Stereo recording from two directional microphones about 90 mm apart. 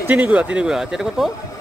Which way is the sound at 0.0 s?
15° right (ahead or behind).